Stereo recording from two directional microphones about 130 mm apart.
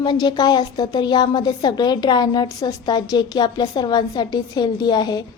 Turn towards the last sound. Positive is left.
turn(degrees=30)  # may be behind; listen again after turning